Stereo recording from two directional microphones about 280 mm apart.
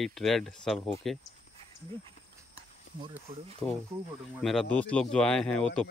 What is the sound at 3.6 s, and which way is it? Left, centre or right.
Speech, centre.